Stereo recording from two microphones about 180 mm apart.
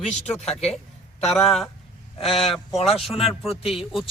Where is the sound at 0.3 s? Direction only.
5° left (ahead or behind).